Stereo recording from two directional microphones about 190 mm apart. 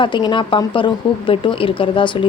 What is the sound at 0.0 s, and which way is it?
Speech, 25° left (ahead or behind).